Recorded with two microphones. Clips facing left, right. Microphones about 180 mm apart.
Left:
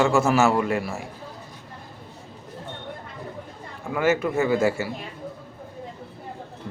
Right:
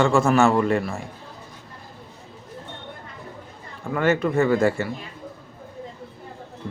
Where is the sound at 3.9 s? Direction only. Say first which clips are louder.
Right 1 dB; 5° left (ahead or behind).